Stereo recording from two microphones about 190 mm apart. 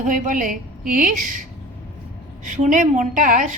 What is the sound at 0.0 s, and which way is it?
A woman's voice, 45° right (ahead or behind).